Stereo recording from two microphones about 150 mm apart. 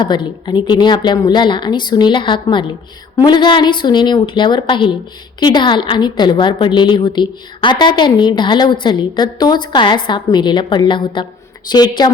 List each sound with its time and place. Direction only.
0.0 s a woman's voice: 30° left (ahead or behind)